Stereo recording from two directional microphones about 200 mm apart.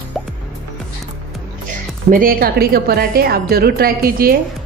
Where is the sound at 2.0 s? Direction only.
45° right (ahead or behind).